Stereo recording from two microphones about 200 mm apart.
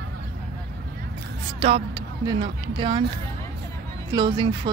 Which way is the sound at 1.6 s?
30° right (ahead or behind).